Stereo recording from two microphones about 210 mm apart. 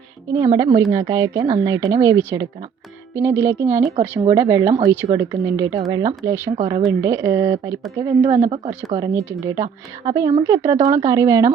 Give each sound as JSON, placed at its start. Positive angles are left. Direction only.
{"t": 0.3, "sound": "speech", "side_deg": -15}
{"t": 8.4, "sound": "speech", "side_deg": -30}
{"t": 9.0, "sound": "speech", "side_deg": -15}